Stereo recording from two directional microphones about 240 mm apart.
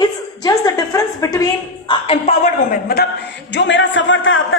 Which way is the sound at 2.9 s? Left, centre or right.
Left.